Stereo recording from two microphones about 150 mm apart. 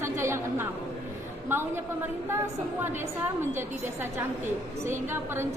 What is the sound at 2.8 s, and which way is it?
A woman's voice, 15° right (ahead or behind).